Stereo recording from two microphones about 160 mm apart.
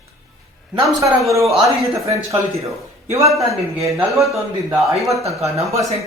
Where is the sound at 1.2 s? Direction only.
Centre (ahead or behind).